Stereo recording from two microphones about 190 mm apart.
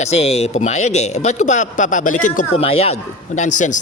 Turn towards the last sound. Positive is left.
turn(degrees=40)  # may be behind; listen again after turning